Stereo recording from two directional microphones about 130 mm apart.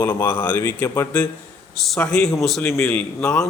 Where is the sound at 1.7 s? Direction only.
Centre (ahead or behind).